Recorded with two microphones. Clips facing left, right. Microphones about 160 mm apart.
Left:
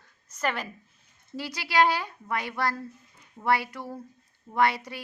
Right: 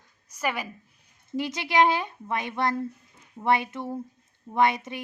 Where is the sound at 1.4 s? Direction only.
20° right (ahead or behind).